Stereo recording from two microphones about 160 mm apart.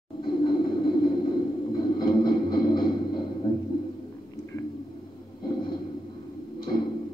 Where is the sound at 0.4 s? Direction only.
30° left (ahead or behind).